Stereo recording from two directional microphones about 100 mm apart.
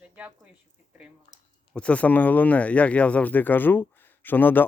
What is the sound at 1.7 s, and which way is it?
Speech, 10° left (ahead or behind).